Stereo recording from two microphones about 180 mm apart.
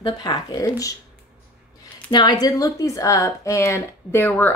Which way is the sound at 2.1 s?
25° left (ahead or behind).